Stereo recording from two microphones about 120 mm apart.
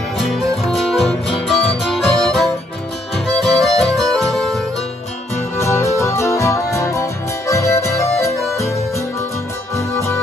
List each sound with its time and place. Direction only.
0.2 s music: centre (ahead or behind)
3.5 s music: centre (ahead or behind)
5.6 s music: 25° left (ahead or behind)
9.8 s music: 25° left (ahead or behind)